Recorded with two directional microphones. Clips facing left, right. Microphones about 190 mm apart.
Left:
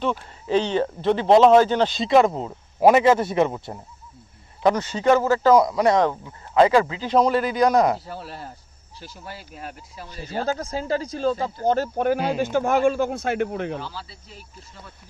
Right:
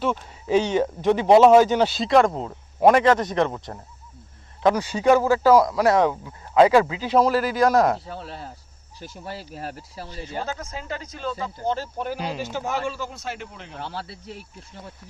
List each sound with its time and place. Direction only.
0.4 s speech: 10° right (ahead or behind); by 3.8 s 10° left (ahead or behind)
4.6 s speech: 10° right (ahead or behind)
9.0 s speech: 30° right (ahead or behind)
10.3 s speech: 35° left (ahead or behind)
11.6 s speech: 50° left (ahead or behind)
13.8 s speech: 65° right (ahead or behind)